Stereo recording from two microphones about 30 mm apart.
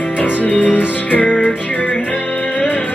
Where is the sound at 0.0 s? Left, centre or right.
Left.